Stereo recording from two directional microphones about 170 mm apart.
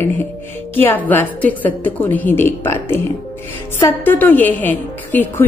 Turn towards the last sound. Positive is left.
turn(degrees=10)  # may be behind; listen again after turning